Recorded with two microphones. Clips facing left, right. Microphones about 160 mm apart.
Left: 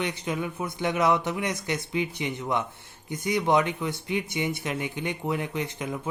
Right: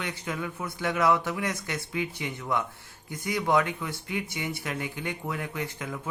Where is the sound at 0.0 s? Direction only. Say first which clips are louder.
Left 4 dB; 20° left (ahead or behind).